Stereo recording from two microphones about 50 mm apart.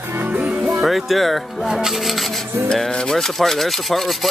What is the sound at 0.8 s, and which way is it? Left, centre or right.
Speech, centre.